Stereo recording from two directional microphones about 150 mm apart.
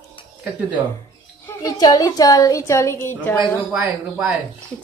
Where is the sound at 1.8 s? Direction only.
25° left (ahead or behind).